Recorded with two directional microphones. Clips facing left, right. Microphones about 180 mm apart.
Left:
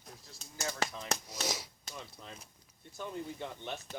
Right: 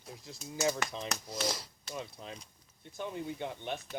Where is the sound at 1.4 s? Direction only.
5° left (ahead or behind).